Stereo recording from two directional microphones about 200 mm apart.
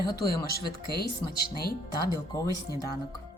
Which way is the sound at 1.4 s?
50° left (ahead or behind).